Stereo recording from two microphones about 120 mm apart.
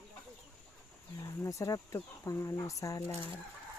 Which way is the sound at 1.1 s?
25° left (ahead or behind).